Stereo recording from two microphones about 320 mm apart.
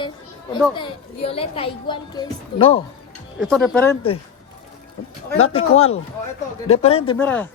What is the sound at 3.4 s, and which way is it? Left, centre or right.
Speech, centre.